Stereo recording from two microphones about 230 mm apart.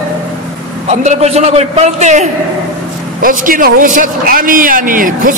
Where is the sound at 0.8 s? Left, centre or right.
Right.